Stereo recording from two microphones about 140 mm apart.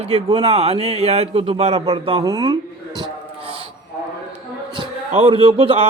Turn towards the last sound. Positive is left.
turn(degrees=-40)  # may be behind; listen again after turning